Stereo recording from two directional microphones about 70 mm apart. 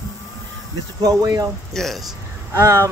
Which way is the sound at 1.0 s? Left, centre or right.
Right.